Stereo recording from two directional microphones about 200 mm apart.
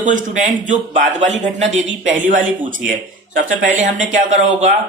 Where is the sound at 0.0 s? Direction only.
40° right (ahead or behind).